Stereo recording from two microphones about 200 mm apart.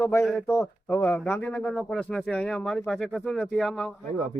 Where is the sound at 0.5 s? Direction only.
15° left (ahead or behind).